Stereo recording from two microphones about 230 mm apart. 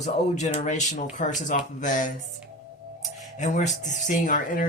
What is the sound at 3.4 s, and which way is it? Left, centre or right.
Speech, left.